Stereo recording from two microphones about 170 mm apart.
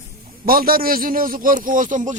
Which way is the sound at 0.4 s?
60° right (ahead or behind).